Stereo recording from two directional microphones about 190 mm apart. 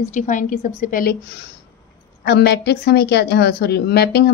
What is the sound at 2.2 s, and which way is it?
A woman's voice, 60° left (ahead or behind).